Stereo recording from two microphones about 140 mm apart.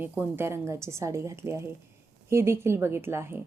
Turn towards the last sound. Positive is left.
turn(degrees=-15)  # may be behind; listen again after turning